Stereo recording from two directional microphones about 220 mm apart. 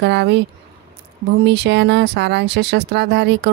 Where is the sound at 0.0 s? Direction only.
50° right (ahead or behind).